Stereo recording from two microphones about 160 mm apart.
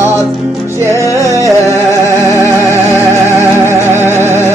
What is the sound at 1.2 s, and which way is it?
Music, 20° right (ahead or behind).